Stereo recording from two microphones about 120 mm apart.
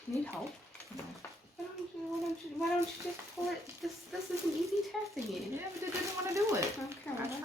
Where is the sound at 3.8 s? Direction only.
Centre (ahead or behind).